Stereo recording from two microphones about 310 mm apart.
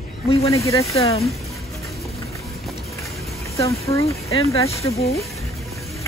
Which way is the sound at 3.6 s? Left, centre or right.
Centre.